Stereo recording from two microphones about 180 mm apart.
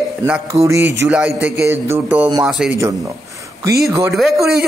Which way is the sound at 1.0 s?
5° right (ahead or behind).